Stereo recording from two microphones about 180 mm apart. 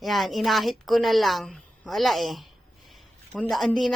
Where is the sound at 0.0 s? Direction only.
Centre (ahead or behind).